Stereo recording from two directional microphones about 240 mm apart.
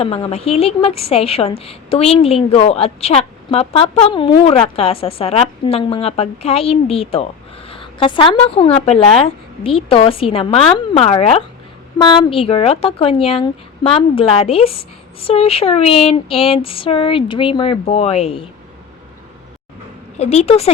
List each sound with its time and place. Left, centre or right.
0.0 s a woman's voice: left
20.1 s a woman's voice: left